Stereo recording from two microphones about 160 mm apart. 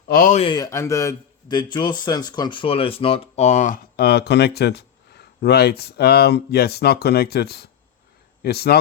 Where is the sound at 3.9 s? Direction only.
90° left.